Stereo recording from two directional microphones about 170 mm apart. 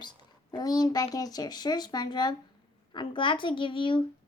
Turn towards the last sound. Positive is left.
turn(degrees=30)  # may be behind; listen again after turning